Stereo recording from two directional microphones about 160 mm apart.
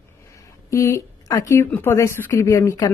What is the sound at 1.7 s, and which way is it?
A woman's voice, 15° left (ahead or behind).